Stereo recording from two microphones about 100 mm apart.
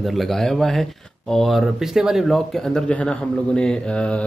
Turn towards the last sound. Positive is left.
turn(degrees=10)  # may be behind; listen again after turning